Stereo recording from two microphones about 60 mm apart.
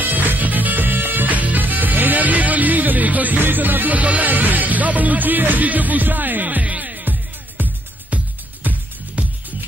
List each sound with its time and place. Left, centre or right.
0.0 s music: right